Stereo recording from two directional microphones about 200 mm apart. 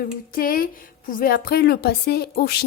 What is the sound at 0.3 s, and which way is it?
A woman's voice, 45° left (ahead or behind).